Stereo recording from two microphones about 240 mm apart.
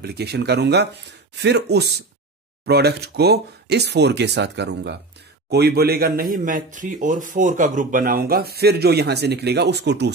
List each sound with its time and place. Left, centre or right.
0.0 s a man's voice: right